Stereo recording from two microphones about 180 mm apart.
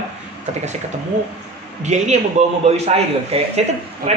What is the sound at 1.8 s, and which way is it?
Speech, 40° right (ahead or behind).